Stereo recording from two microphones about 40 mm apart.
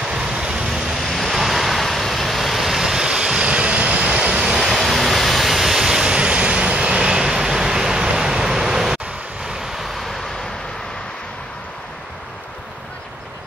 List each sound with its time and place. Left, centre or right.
0.0 s waves: centre
4.4 s waves: centre
6.0 s vehicle: right